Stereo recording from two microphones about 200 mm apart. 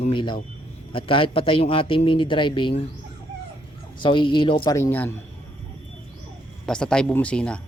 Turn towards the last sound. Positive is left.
turn(degrees=5)  # may be behind; listen again after turning